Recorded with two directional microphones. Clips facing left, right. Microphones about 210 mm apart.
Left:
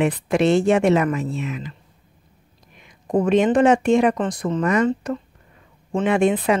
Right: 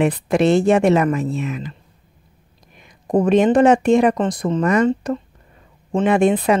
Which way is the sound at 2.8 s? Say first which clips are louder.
Right 3 dB; 40° right (ahead or behind).